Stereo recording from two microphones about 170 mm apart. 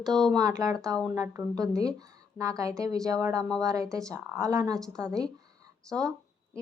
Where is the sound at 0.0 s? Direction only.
Centre (ahead or behind).